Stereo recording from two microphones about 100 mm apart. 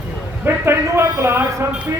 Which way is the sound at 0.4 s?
25° right (ahead or behind).